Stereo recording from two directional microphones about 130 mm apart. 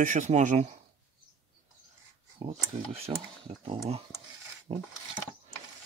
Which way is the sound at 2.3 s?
50° right (ahead or behind).